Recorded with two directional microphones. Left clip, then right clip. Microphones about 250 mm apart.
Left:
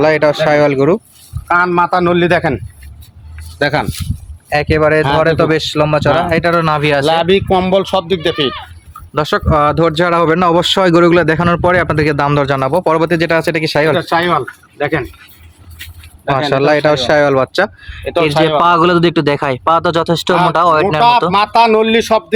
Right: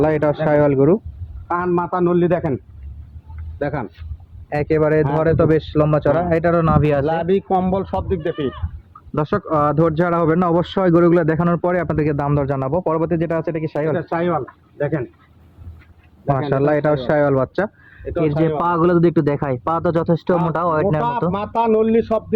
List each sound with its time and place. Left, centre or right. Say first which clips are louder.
0.0 s speech: left 7 dB; centre
1.5 s a man's voice: left 9 dB; left
3.6 s a man's voice: left 10 dB; left
4.4 s speech: left 6 dB; centre
7.0 s speech: left 7 dB; left
9.1 s speech: left 6 dB; centre; by 13.9 s left
13.9 s speech: left 8 dB; left
16.3 s speech: left 6 dB; centre
21.1 s speech: left 11 dB; left